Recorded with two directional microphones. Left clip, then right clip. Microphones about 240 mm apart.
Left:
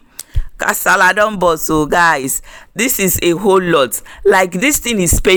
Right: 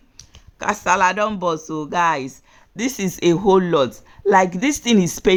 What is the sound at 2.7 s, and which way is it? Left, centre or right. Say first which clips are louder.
Speech: left 9 dB; centre.